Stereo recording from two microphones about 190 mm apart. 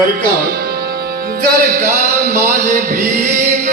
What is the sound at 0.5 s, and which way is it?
Music, 55° right (ahead or behind).